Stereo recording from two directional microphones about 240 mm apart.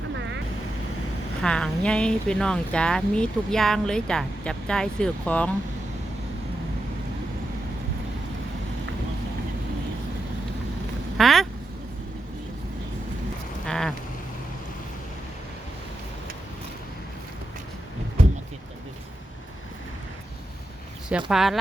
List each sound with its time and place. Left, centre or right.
1.4 s speech: centre
11.2 s speech: centre
13.7 s a sound: centre
21.2 s speech: centre